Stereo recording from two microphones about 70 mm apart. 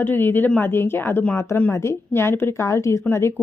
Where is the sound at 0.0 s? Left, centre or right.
Left.